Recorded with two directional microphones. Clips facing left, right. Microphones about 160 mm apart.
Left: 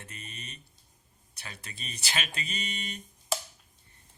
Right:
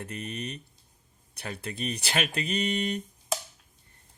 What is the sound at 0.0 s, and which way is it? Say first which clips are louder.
Speech: right 12 dB; 55° right (ahead or behind).